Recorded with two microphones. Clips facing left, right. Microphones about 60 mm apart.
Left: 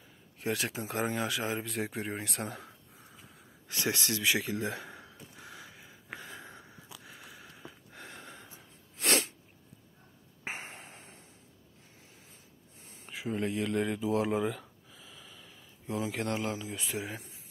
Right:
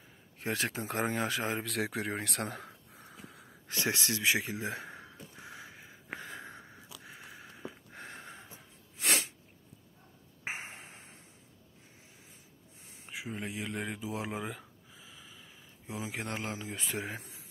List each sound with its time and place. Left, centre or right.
0.4 s speech: right
1.6 s speech: right
2.1 s speech: right
2.9 s wheeze: right
3.6 s a sound: right
8.9 s sneeze: centre
10.4 s a sound: centre
13.0 s speech: centre
14.5 s a sound: centre
15.9 s speech: centre
16.3 s speech: right